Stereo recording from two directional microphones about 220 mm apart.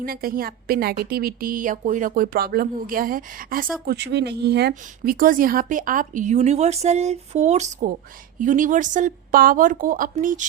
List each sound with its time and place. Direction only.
0.0 s a woman's voice: 40° right (ahead or behind)